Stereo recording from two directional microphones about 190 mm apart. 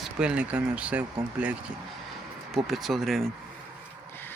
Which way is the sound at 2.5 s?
Centre (ahead or behind).